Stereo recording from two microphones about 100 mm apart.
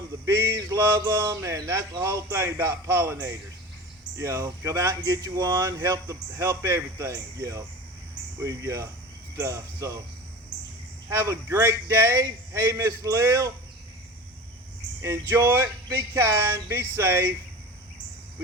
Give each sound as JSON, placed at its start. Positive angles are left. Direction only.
{"t": 0.3, "sound": "a sound", "side_deg": -25}
{"t": 0.5, "sound": "speech", "side_deg": -40}
{"t": 11.1, "sound": "speech", "side_deg": -30}
{"t": 15.0, "sound": "speech", "side_deg": -25}